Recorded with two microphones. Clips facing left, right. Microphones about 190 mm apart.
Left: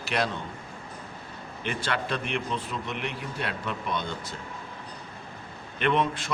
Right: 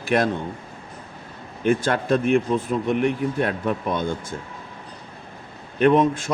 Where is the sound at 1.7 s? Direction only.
45° right (ahead or behind).